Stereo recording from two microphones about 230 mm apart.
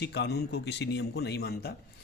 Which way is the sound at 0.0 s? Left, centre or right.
Left.